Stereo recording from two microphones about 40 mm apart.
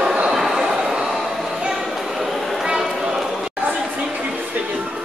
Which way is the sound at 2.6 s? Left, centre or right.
Centre.